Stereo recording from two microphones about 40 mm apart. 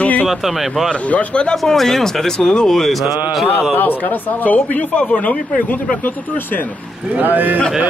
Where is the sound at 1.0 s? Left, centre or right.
Left.